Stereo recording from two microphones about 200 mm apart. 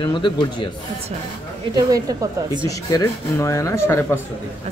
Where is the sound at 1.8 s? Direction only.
20° right (ahead or behind).